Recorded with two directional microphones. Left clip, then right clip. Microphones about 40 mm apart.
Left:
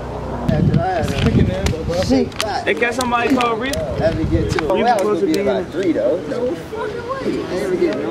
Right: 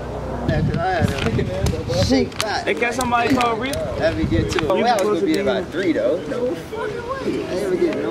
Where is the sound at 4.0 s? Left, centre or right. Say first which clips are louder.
Left 1 dB; right.